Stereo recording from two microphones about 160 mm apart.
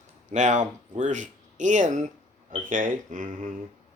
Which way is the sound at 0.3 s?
50° right (ahead or behind).